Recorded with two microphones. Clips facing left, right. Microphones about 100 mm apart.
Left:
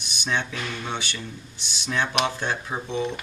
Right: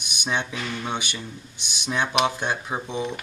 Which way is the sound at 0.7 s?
15° right (ahead or behind).